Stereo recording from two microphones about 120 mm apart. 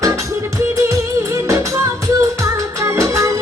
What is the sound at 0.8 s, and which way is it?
Music, 25° right (ahead or behind).